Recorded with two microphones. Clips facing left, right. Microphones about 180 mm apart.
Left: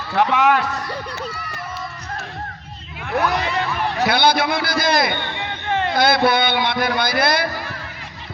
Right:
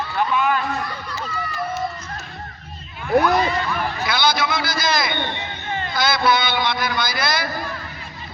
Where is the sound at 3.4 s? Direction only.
75° left (ahead or behind); by 5.2 s 55° left (ahead or behind).